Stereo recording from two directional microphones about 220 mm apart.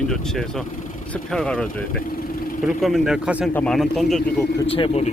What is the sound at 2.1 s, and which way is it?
Vehicle, 40° left (ahead or behind).